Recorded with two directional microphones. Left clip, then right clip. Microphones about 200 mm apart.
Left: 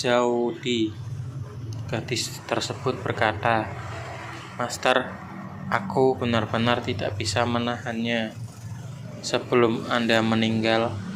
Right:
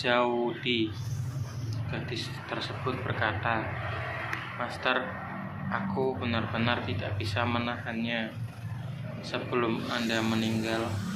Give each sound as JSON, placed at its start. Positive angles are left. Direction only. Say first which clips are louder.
{"t": 0.0, "sound": "speech", "louder": "left 4 dB", "side_deg": 35}
{"t": 1.9, "sound": "a man's voice", "louder": "left 8 dB", "side_deg": 45}
{"t": 4.6, "sound": "a man's voice", "louder": "left 8 dB", "side_deg": 50}
{"t": 10.1, "sound": "speech", "louder": "left 8 dB", "side_deg": 30}